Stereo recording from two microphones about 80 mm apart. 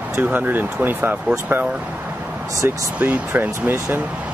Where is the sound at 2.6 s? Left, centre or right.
Right.